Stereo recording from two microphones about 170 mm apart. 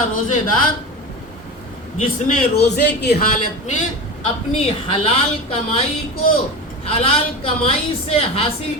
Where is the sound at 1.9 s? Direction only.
65° left (ahead or behind).